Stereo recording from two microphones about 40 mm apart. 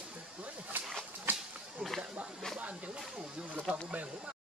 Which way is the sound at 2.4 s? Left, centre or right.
Centre.